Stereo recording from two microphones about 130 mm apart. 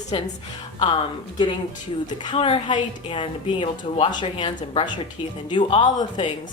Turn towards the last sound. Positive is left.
turn(degrees=35)  # may be behind; listen again after turning